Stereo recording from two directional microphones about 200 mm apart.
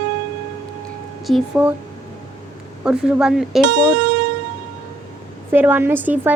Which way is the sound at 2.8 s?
5° right (ahead or behind).